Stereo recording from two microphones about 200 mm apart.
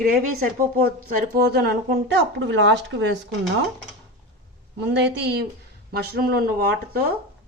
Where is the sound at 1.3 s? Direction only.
50° right (ahead or behind).